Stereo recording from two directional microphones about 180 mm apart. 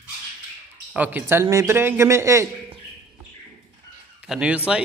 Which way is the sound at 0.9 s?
10° right (ahead or behind).